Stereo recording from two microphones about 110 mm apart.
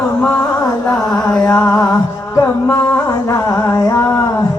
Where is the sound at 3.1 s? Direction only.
30° left (ahead or behind).